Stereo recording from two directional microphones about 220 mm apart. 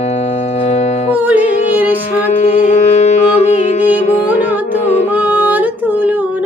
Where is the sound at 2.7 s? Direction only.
30° left (ahead or behind).